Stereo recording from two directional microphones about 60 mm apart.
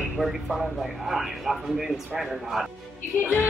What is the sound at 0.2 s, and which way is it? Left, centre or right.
A man's voice, centre.